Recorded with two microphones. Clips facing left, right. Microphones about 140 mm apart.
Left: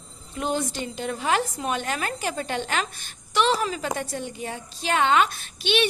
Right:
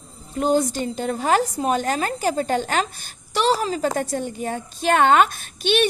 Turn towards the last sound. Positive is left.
turn(degrees=-45)  # may be behind; listen again after turning